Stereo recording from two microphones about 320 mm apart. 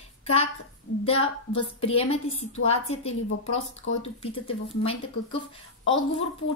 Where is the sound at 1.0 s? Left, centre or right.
Centre.